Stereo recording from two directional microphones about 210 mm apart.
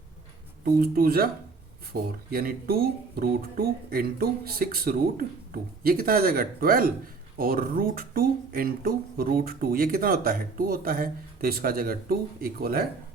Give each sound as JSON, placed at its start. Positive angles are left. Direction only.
{"t": 0.6, "sound": "speech", "side_deg": -45}